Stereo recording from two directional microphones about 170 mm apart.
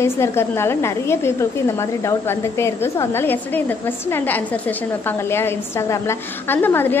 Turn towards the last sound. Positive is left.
turn(degrees=10)  # may be behind; listen again after turning